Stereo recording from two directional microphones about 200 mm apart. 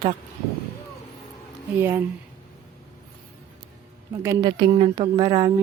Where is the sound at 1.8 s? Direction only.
10° right (ahead or behind).